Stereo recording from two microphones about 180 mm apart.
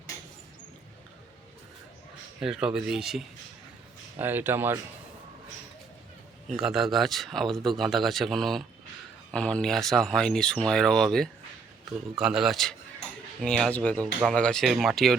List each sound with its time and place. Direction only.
2.4 s speech: 5° right (ahead or behind)
6.5 s speech: centre (ahead or behind)